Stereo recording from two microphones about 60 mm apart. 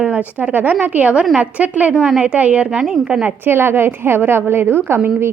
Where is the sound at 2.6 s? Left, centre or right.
Centre.